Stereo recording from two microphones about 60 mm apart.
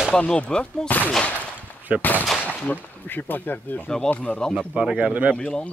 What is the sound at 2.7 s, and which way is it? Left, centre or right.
Speech, left.